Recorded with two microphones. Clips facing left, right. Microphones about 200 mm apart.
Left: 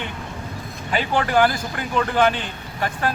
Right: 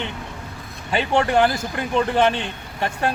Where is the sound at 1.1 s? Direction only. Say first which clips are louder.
Right 1 dB; 25° right (ahead or behind).